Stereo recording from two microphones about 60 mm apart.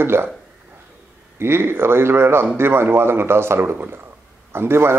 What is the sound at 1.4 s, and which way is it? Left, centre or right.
A man's voice, right.